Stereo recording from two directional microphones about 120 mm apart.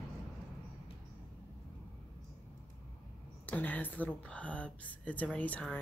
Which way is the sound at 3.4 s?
15° left (ahead or behind).